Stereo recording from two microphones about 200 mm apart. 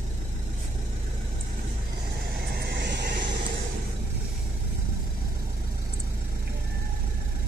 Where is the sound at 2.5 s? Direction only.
55° right (ahead or behind).